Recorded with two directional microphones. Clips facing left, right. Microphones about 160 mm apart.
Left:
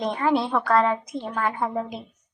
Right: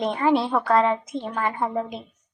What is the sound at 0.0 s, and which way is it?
A woman's voice, 5° right (ahead or behind).